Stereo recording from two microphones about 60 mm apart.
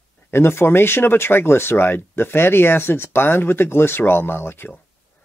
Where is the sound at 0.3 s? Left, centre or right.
Left.